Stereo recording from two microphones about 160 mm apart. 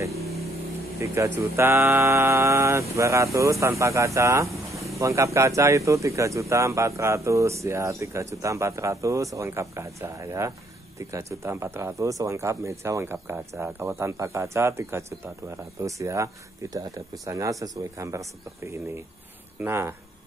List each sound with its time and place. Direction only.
0.9 s speech: 20° right (ahead or behind)